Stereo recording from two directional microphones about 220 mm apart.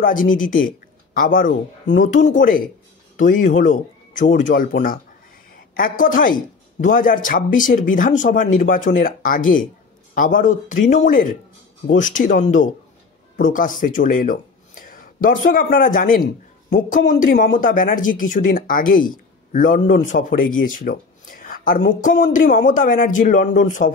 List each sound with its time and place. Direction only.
0.0 s speech: 40° left (ahead or behind)